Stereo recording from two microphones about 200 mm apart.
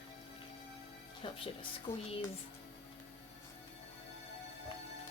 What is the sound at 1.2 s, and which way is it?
Speech, 25° left (ahead or behind).